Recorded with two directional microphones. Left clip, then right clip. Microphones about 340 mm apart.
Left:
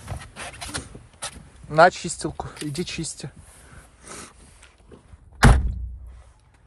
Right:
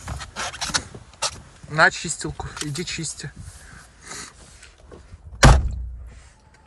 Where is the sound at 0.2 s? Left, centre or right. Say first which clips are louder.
Right 11 dB; right.